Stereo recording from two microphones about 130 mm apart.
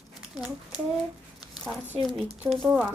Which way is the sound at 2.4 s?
20° right (ahead or behind).